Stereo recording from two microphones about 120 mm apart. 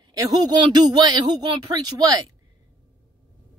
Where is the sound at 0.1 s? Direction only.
30° right (ahead or behind).